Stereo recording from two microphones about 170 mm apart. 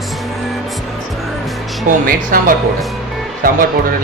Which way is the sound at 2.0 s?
60° right (ahead or behind).